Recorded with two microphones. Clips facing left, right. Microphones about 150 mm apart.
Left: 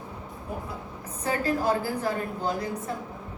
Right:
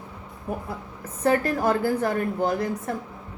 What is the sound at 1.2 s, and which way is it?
A woman's voice, 60° right (ahead or behind).